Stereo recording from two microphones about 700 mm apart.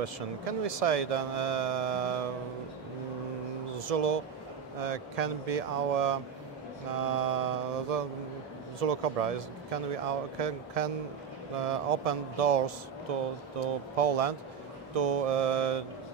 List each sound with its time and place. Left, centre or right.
0.0 s speech: right
3.7 s speech: right